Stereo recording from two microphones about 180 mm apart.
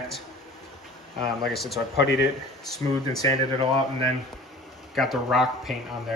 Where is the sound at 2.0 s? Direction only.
75° left (ahead or behind).